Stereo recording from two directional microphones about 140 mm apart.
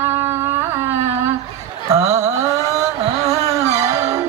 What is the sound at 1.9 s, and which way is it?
Mantra, 20° right (ahead or behind).